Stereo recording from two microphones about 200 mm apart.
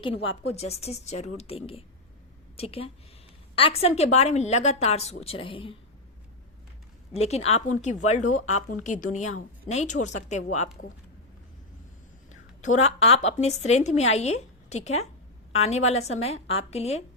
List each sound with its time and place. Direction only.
0.0 s a woman's voice: 30° left (ahead or behind)
7.1 s a woman's voice: 30° left (ahead or behind)
12.3 s a woman's voice: 35° left (ahead or behind)